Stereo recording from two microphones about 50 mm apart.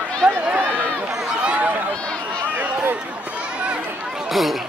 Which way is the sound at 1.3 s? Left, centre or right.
Right.